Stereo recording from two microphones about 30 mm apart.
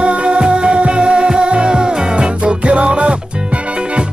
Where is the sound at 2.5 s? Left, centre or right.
Right.